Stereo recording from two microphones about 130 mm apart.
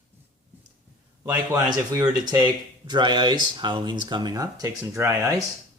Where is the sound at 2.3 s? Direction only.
35° right (ahead or behind).